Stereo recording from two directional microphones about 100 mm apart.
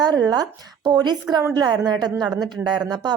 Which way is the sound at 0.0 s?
40° right (ahead or behind).